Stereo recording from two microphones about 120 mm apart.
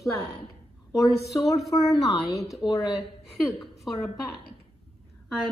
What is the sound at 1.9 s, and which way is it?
Speech, centre (ahead or behind).